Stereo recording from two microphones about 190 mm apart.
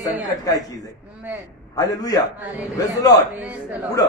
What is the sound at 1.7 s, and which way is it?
Speech, 20° left (ahead or behind).